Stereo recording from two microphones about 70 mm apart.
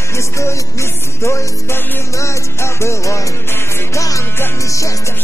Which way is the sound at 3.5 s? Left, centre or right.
Left.